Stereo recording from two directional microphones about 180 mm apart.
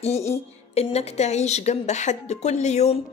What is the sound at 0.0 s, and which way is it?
A woman's voice, 35° left (ahead or behind).